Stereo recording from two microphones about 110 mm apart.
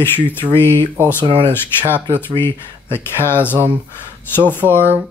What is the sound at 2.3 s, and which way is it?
Speech, 20° left (ahead or behind).